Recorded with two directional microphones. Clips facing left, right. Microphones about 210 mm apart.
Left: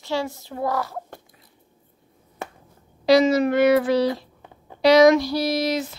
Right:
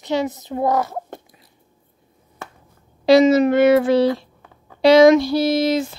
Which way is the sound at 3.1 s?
25° right (ahead or behind).